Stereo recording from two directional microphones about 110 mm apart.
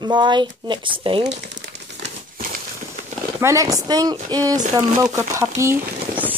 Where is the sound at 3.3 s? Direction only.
30° right (ahead or behind).